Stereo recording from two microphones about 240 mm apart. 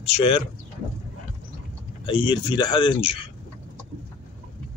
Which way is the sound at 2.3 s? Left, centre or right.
Centre.